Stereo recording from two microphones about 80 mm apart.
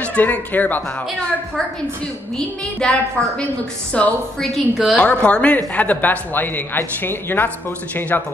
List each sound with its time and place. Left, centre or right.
0.0 s speech: centre
2.3 s a woman's voice: centre
4.4 s a woman's voice: centre
4.9 s a woman's voice: centre